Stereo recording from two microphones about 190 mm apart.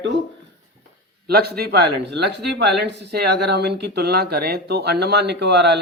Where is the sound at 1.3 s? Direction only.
55° right (ahead or behind).